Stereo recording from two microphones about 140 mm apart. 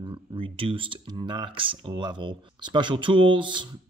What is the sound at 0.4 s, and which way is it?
Speech, 40° right (ahead or behind).